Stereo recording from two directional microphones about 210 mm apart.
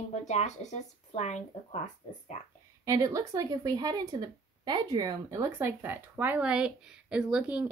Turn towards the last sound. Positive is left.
turn(degrees=-5)  # may be behind; listen again after turning